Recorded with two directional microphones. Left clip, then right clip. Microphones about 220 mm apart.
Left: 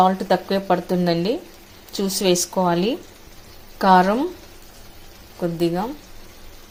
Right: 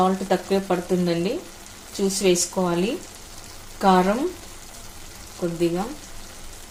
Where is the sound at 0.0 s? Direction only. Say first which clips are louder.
Left 4 dB; 40° left (ahead or behind).